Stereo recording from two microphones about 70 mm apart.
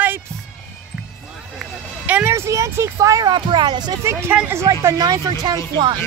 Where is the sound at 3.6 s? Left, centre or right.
Right.